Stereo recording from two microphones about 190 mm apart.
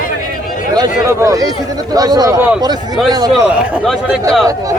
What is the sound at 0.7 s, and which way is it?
A man's voice, 20° right (ahead or behind).